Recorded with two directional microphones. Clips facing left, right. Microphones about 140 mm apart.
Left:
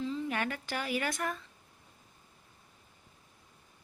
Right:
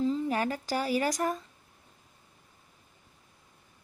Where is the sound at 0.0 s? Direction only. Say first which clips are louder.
Right 6 dB; 35° right (ahead or behind).